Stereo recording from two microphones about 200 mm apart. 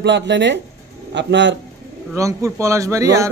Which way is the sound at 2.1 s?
15° right (ahead or behind).